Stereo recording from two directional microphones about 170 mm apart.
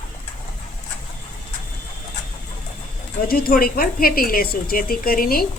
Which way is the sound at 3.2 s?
60° left (ahead or behind).